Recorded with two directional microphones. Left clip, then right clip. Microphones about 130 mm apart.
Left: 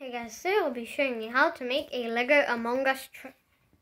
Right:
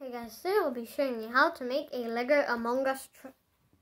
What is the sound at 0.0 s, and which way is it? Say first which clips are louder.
A woman's voice: left 4 dB; 25° right (ahead or behind).